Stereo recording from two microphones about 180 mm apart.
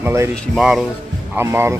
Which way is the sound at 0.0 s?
15° right (ahead or behind).